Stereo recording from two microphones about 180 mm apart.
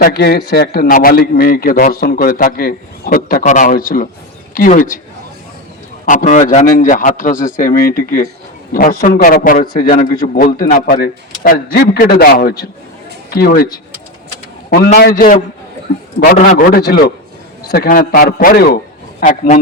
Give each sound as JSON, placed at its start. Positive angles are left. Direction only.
{"t": 0.0, "sound": "a man's voice", "side_deg": 60}
{"t": 6.1, "sound": "a man's voice", "side_deg": 45}
{"t": 16.2, "sound": "a man's voice", "side_deg": 55}
{"t": 19.2, "sound": "a man's voice", "side_deg": 45}